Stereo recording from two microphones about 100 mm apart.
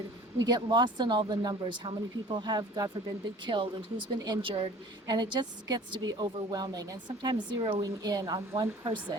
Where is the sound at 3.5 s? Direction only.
55° right (ahead or behind).